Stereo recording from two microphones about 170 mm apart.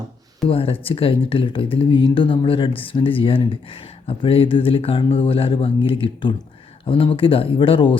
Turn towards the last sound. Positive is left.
turn(degrees=30)  # may be behind; listen again after turning